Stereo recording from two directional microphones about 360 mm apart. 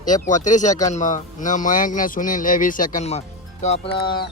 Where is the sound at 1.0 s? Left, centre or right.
Left.